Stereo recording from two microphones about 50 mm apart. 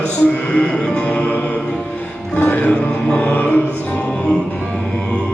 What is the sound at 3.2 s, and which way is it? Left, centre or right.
Music, left.